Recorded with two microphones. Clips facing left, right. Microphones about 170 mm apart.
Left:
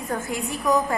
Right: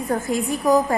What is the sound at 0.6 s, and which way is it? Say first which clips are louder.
Speech: right 4 dB; 35° right (ahead or behind).